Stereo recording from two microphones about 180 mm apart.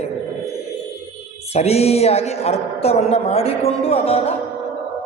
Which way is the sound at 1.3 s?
35° left (ahead or behind).